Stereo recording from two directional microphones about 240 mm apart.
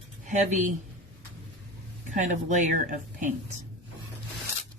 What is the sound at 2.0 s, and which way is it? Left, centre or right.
Speech, right.